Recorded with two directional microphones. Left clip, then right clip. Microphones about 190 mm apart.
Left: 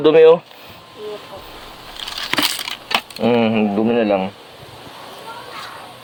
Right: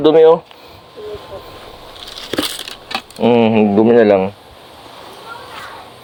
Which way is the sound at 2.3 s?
30° left (ahead or behind).